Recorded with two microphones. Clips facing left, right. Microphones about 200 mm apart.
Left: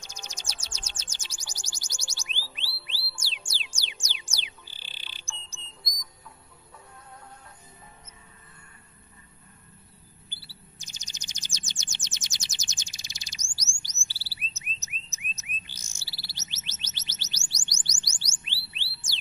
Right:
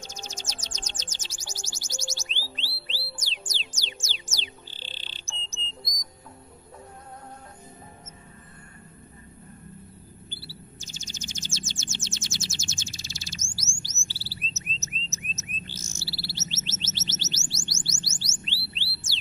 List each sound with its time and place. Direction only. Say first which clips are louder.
0.0 s music: right 5 dB; 15° left (ahead or behind)
3.7 s music: right 4 dB; 10° left (ahead or behind)
5.8 s music: right 5 dB; 35° right (ahead or behind)
10.3 s chirp: right 8 dB; 15° left (ahead or behind)
13.6 s chirp tone: right 8 dB; 15° left (ahead or behind)
14.8 s a sound: right 8 dB; 15° left (ahead or behind)
15.6 s chirp: right 11 dB; 15° left (ahead or behind)